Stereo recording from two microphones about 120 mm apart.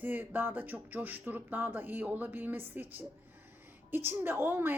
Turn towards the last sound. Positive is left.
turn(degrees=-20)  # may be behind; listen again after turning